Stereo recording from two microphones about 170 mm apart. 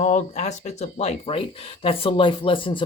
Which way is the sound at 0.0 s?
40° left (ahead or behind).